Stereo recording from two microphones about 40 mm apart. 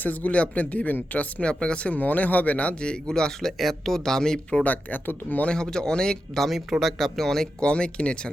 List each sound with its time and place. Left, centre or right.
0.0 s speech: left
1.5 s speech: left
1.9 s speech: left
2.8 s speech: centre
3.6 s speech: centre
4.6 s speech: left
5.5 s speech: centre
6.4 s speech: centre
7.6 s speech: left